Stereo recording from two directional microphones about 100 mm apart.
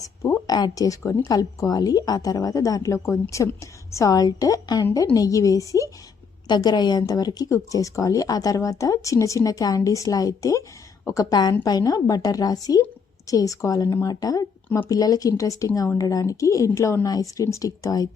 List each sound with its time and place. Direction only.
0.0 s a sound: 30° left (ahead or behind)
0.5 s a woman's voice: 40° left (ahead or behind)
6.5 s a woman's voice: 45° left (ahead or behind)